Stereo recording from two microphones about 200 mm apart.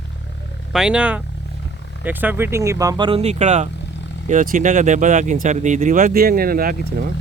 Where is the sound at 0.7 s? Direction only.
5° right (ahead or behind); by 6.7 s 45° right (ahead or behind).